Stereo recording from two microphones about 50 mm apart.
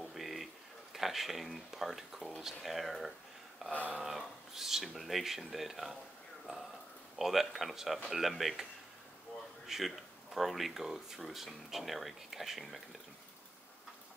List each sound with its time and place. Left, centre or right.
0.0 s a sound: centre
0.9 s speech: centre
7.2 s speech: centre
9.7 s speech: centre